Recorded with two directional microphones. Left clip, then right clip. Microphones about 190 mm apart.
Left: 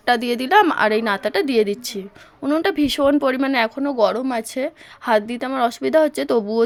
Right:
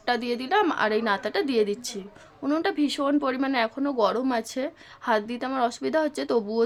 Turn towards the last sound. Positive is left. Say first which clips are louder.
# left 6 dB
turn(degrees=25)  # may be behind; listen again after turning